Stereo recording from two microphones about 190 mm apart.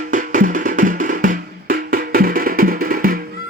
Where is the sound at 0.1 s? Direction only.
45° right (ahead or behind).